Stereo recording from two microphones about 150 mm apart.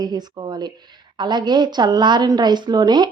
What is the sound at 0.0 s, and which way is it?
Speech, 30° right (ahead or behind).